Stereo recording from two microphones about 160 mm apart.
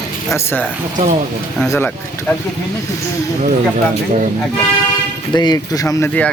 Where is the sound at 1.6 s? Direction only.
10° left (ahead or behind).